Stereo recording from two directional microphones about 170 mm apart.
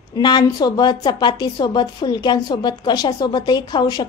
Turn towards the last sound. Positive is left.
turn(degrees=25)  # may be behind; listen again after turning